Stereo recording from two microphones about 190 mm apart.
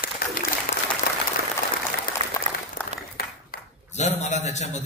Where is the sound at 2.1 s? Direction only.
45° left (ahead or behind).